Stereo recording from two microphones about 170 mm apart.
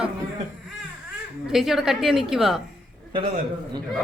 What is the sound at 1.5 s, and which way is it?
A woman's voice, centre (ahead or behind).